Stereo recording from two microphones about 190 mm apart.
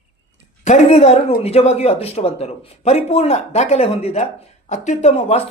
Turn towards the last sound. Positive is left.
turn(degrees=35)  # may be behind; listen again after turning